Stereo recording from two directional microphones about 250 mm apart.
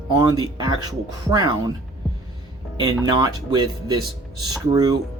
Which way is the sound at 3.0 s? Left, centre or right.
Centre.